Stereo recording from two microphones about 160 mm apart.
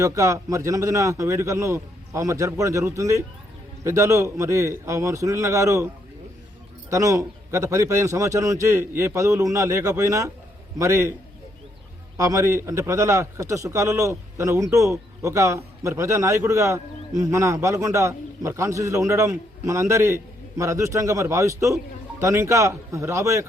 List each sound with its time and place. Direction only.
0.0 s a man's voice: 20° right (ahead or behind)
6.9 s a man's voice: 20° right (ahead or behind)
12.1 s a man's voice: 20° right (ahead or behind)